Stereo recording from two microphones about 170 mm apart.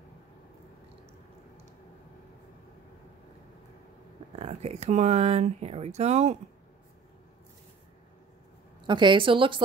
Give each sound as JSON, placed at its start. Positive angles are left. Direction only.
{"t": 4.4, "sound": "speech", "side_deg": -40}
{"t": 8.8, "sound": "a woman's voice", "side_deg": -25}